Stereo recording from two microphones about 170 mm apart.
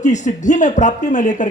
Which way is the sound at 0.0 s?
45° left (ahead or behind).